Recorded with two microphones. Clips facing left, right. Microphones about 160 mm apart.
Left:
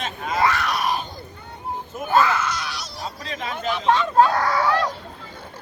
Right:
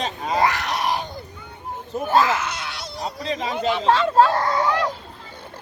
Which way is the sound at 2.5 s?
25° right (ahead or behind).